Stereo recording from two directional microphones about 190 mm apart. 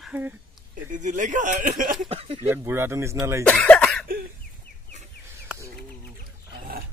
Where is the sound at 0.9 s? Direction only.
40° right (ahead or behind).